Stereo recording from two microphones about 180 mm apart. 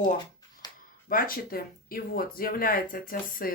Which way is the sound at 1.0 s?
50° left (ahead or behind).